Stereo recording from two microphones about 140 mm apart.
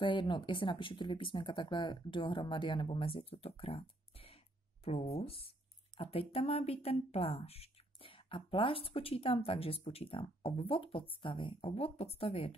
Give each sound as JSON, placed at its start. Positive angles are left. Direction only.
{"t": 0.0, "sound": "speech", "side_deg": 35}